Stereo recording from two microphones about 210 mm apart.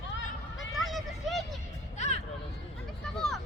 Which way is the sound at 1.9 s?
35° left (ahead or behind).